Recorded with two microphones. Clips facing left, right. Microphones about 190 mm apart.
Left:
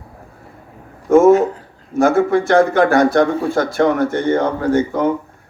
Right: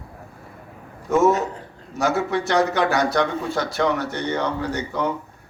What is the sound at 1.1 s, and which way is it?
A man's voice, 50° left (ahead or behind).